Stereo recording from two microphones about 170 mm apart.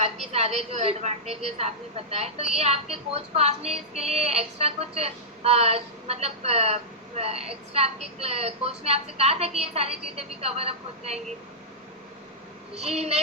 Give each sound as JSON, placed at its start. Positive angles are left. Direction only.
{"t": 0.0, "sound": "a woman's voice", "side_deg": -40}
{"t": 12.7, "sound": "a woman's voice", "side_deg": -40}